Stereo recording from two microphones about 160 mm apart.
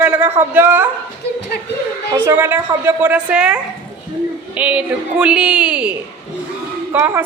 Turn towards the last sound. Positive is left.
turn(degrees=-15)  # may be behind; listen again after turning